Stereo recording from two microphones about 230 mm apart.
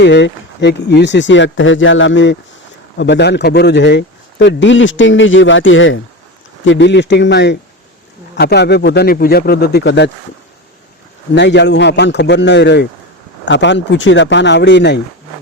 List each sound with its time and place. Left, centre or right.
0.0 s speech: left
11.3 s speech: left